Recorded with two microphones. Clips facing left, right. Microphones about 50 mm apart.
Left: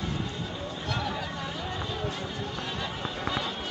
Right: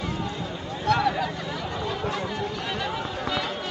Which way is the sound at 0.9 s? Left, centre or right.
Right.